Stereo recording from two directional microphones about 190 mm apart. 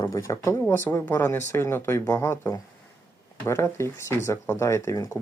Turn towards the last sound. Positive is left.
turn(degrees=15)  # may be behind; listen again after turning